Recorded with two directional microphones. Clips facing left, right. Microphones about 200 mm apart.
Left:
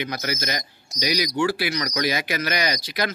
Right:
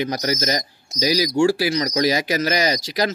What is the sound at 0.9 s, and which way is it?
Speech, 25° right (ahead or behind).